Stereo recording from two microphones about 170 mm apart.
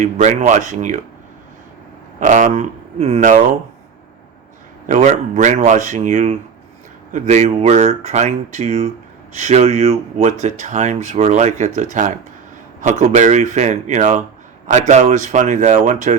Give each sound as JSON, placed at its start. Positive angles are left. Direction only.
{"t": 0.0, "sound": "speech", "side_deg": -45}
{"t": 2.2, "sound": "speech", "side_deg": -45}
{"t": 4.9, "sound": "speech", "side_deg": -45}